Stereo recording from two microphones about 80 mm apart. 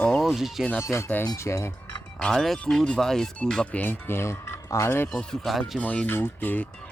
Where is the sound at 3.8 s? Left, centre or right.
Left.